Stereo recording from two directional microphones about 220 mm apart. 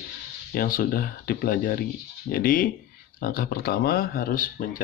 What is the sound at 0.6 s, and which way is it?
Speech, 40° left (ahead or behind).